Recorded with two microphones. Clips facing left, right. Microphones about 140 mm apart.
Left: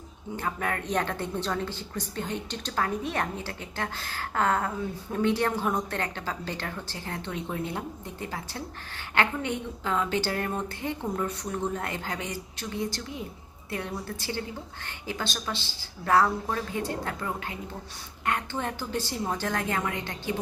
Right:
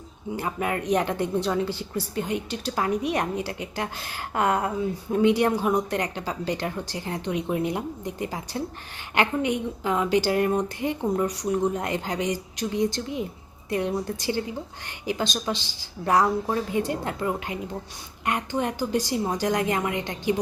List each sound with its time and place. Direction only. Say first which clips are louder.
0.3 s speech: right 3 dB; 10° right (ahead or behind)